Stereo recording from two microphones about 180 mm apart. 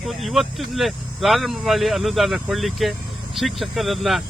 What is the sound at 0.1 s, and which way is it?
Speech, centre (ahead or behind).